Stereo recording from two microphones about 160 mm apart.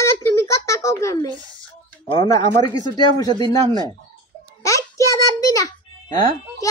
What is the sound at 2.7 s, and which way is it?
Speech, 25° left (ahead or behind).